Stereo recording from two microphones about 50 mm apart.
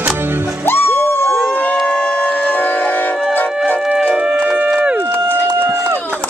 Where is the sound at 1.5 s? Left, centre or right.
Left.